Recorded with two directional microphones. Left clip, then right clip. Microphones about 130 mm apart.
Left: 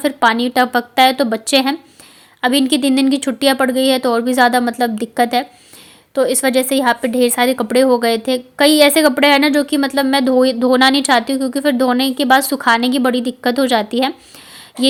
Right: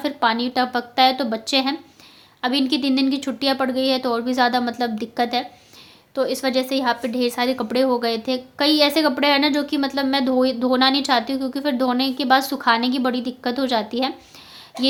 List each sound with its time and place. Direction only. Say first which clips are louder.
0.0 s a woman's voice: left 6 dB; 50° left (ahead or behind)